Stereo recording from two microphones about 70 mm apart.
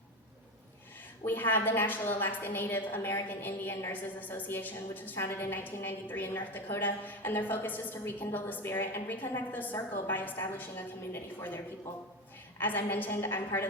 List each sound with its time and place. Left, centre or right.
1.2 s a woman's voice: left